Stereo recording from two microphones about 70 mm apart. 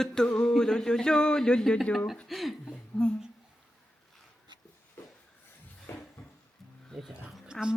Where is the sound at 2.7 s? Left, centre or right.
Centre.